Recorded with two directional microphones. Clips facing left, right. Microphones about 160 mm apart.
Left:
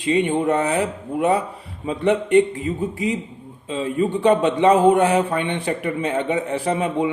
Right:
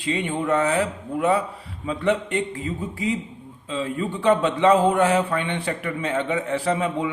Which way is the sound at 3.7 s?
20° left (ahead or behind).